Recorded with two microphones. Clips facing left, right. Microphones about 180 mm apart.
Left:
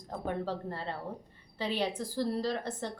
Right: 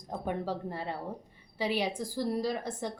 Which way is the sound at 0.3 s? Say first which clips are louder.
Right 1 dB; 15° right (ahead or behind).